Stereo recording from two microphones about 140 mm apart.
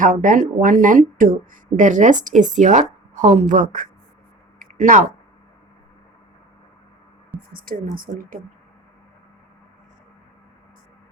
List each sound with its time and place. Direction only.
0.0 s speech: 75° right (ahead or behind)
4.6 s a sound: 65° right (ahead or behind)
7.5 s speech: 90° right